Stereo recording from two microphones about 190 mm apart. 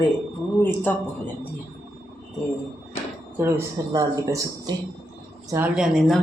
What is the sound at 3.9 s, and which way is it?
A woman's voice, 20° right (ahead or behind).